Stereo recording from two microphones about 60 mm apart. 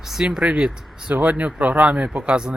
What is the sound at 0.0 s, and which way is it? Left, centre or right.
Speech, centre.